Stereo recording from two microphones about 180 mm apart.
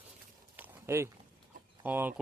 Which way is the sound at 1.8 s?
10° right (ahead or behind).